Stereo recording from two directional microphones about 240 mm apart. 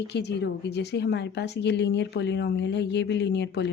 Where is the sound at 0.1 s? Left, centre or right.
Left.